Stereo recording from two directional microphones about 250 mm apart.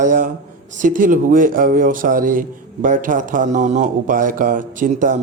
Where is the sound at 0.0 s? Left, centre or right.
Right.